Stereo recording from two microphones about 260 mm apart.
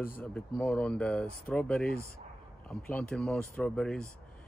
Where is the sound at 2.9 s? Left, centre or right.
Centre.